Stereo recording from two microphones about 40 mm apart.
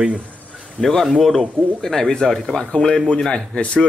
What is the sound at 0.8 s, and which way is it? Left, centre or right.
Speech, centre.